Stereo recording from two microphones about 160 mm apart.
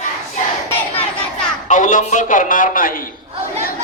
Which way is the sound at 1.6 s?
55° left (ahead or behind).